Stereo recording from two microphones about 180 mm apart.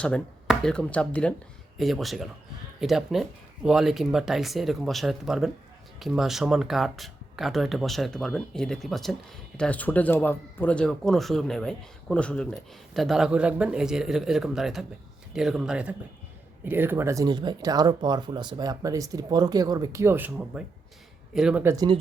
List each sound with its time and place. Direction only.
0.0 s speech: 5° left (ahead or behind); by 21.8 s 15° right (ahead or behind)